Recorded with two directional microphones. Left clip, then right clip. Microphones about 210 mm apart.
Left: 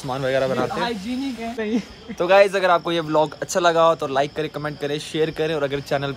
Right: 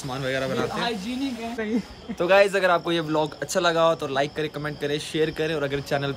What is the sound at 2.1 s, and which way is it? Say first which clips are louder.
Speech: left 3 dB; 5° right (ahead or behind).